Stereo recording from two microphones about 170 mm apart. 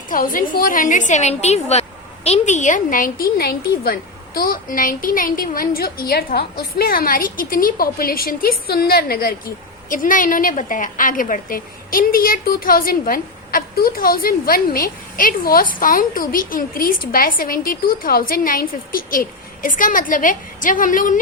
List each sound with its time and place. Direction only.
0.1 s a woman's voice: 55° left (ahead or behind)
9.9 s a woman's voice: 50° left (ahead or behind)